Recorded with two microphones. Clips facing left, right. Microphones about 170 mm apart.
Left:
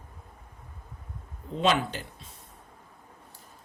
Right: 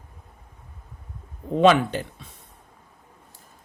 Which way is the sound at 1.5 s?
60° right (ahead or behind).